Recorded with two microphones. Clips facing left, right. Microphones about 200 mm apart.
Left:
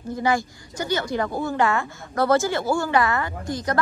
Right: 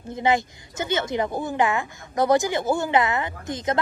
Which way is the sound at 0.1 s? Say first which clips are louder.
Right 1 dB; 20° right (ahead or behind).